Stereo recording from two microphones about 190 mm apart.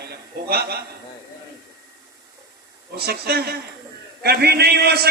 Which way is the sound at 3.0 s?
55° right (ahead or behind).